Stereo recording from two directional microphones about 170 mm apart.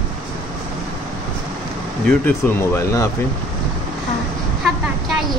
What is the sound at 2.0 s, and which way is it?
Speech, 10° left (ahead or behind).